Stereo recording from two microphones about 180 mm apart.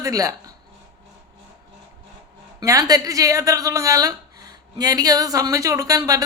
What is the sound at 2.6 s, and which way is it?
A woman's voice, 20° right (ahead or behind).